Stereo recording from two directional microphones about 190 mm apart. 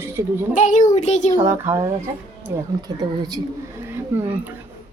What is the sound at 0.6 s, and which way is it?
Speech, 40° left (ahead or behind).